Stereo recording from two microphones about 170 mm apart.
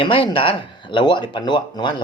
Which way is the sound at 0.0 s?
30° left (ahead or behind).